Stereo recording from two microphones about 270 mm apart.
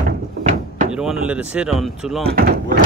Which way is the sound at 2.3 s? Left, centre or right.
Right.